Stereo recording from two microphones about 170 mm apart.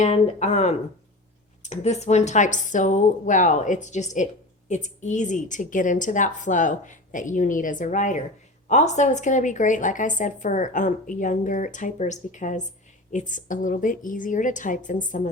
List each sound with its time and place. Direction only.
0.0 s a woman's voice: 40° left (ahead or behind)